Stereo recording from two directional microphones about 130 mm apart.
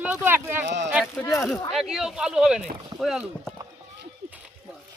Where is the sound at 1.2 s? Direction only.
20° left (ahead or behind).